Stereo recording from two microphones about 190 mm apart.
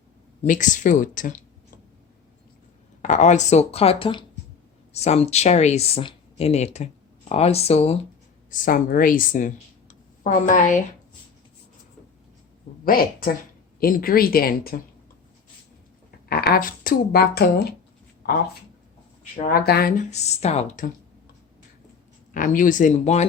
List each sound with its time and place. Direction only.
0.4 s speech: 45° left (ahead or behind)
3.0 s speech: 40° left (ahead or behind)
8.4 s speech: 45° left (ahead or behind)
12.8 s a woman's voice: 50° left (ahead or behind)
16.3 s speech: 50° left (ahead or behind)
19.4 s speech: 50° left (ahead or behind)
20.1 s speech: 35° left (ahead or behind)
22.4 s speech: 45° left (ahead or behind)